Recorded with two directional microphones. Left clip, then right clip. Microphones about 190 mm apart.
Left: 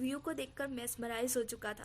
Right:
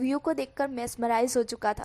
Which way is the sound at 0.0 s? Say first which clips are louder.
Right 11 dB; 35° right (ahead or behind).